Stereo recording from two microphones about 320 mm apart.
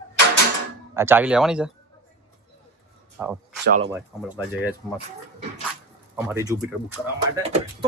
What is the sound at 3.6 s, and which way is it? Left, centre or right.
Speech, right.